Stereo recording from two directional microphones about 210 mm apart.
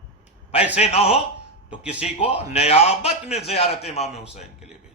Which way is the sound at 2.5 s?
30° left (ahead or behind).